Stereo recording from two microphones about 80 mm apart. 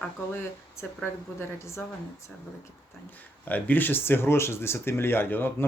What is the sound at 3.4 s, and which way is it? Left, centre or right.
Speech, left.